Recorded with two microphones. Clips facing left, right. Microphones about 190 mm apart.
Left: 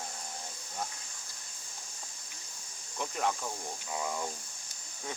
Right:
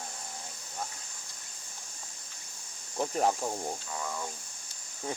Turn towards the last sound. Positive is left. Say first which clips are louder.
# left 1 dB
turn(degrees=15)  # may be behind; listen again after turning